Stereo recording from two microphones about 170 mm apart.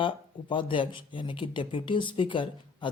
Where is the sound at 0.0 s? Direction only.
30° left (ahead or behind).